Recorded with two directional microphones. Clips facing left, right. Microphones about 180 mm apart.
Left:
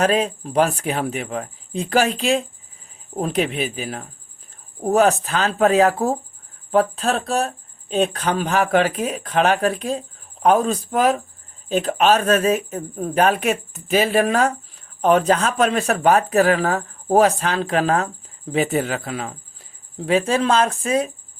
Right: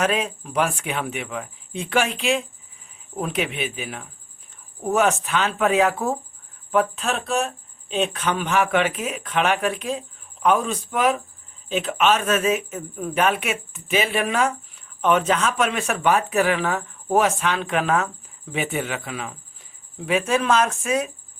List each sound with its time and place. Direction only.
0.0 s speech: 35° left (ahead or behind)